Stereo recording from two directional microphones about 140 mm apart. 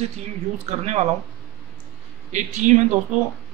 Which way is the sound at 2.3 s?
55° right (ahead or behind).